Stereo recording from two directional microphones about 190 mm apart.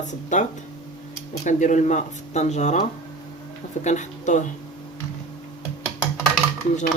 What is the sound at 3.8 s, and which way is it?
Speech, 40° left (ahead or behind).